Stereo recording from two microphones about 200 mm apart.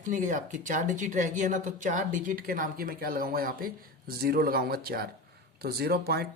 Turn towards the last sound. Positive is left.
turn(degrees=-50)  # may be behind; listen again after turning